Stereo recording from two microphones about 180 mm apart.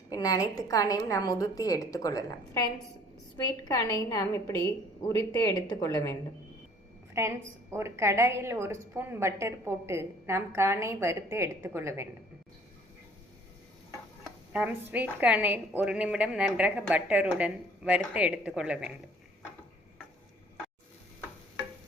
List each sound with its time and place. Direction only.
0.1 s a woman's voice: 20° left (ahead or behind)
3.6 s a woman's voice: 20° left (ahead or behind)
7.1 s a woman's voice: 15° right (ahead or behind)
14.5 s a woman's voice: 10° right (ahead or behind)